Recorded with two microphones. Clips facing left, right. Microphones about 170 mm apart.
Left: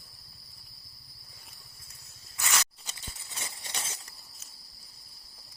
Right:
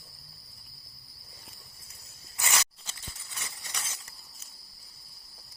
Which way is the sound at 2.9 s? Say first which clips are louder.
Left 1 dB; 25° left (ahead or behind).